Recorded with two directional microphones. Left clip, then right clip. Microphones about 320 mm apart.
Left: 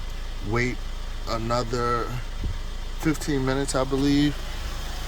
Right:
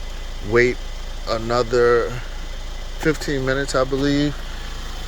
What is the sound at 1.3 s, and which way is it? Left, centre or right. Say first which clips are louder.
Speech: right 7 dB; centre.